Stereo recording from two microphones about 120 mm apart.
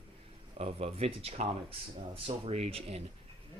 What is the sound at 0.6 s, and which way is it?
Speech, 55° right (ahead or behind).